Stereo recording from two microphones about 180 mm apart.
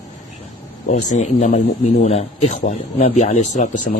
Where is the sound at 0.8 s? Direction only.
40° left (ahead or behind).